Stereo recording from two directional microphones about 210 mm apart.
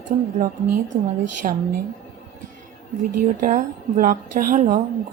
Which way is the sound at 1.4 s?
35° right (ahead or behind).